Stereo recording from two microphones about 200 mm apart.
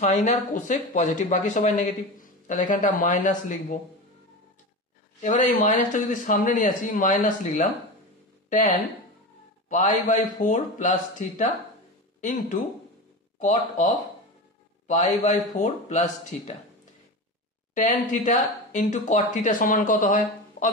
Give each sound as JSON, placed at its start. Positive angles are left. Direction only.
{"t": 0.0, "sound": "speech", "side_deg": 35}
{"t": 5.2, "sound": "speech", "side_deg": 40}
{"t": 9.7, "sound": "speech", "side_deg": 40}
{"t": 17.7, "sound": "speech", "side_deg": 40}